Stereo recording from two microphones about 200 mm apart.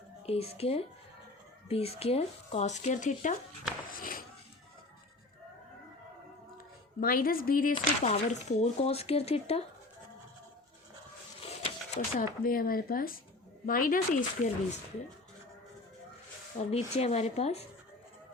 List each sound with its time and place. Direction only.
0.3 s speech: 30° left (ahead or behind)
3.8 s a sound: 45° left (ahead or behind)
7.0 s speech: 45° left (ahead or behind)
8.0 s speech: 35° left (ahead or behind)
11.3 s a sound: 30° left (ahead or behind)
12.1 s speech: 45° left (ahead or behind)
16.6 s speech: 35° left (ahead or behind)